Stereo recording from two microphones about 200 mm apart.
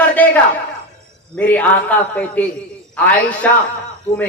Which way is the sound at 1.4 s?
10° left (ahead or behind).